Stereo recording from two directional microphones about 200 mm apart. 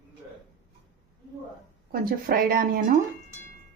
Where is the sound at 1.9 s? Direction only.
45° right (ahead or behind).